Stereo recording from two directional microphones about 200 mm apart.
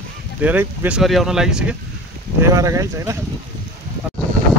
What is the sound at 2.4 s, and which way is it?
Speech, 15° right (ahead or behind).